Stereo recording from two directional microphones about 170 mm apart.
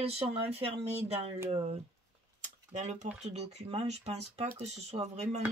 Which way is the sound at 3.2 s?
40° right (ahead or behind).